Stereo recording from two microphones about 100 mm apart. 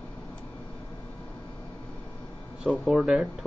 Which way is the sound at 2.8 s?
5° right (ahead or behind).